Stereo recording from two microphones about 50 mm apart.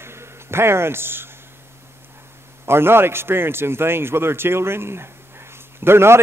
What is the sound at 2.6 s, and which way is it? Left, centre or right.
A man's voice, right.